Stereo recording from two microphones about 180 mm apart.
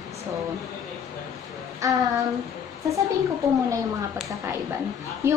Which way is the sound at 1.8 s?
20° right (ahead or behind).